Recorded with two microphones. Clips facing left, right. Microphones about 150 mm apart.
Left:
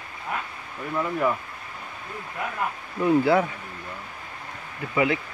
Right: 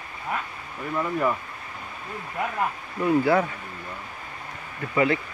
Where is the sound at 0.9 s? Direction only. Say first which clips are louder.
Even; centre (ahead or behind).